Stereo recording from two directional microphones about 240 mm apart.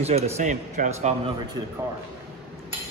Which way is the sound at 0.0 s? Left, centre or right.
Right.